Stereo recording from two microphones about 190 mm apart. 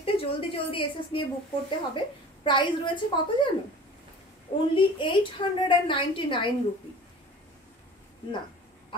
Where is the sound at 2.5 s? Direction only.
25° left (ahead or behind).